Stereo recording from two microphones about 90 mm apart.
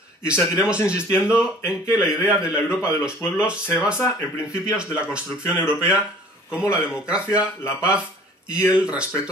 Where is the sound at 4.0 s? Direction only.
35° left (ahead or behind).